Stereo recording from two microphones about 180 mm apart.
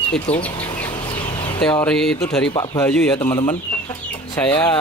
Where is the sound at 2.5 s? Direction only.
25° left (ahead or behind).